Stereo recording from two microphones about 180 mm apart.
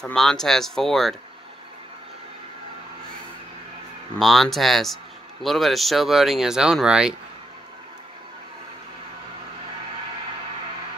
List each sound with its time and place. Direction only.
0.0 s speech: 5° left (ahead or behind)
4.2 s speech: centre (ahead or behind)